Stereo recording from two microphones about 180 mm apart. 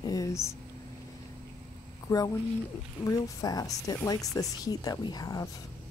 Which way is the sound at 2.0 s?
20° left (ahead or behind).